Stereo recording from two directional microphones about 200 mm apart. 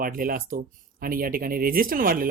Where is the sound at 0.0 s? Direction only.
45° right (ahead or behind).